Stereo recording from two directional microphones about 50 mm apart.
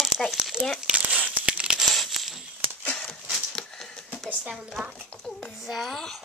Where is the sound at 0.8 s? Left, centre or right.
Right.